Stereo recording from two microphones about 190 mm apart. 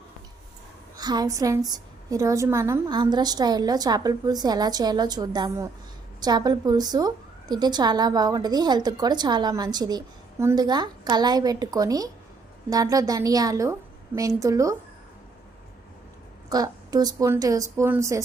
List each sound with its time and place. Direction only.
0.9 s a woman's voice: 20° right (ahead or behind)
16.5 s a woman's voice: 20° right (ahead or behind)